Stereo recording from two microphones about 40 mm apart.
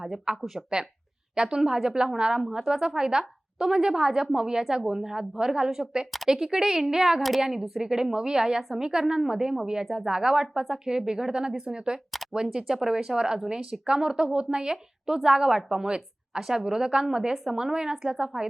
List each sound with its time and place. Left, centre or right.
0.0 s a woman's voice: centre
7.2 s speech: centre
7.9 s a woman's voice: centre
9.8 s speech: centre
10.1 s a woman's voice: centre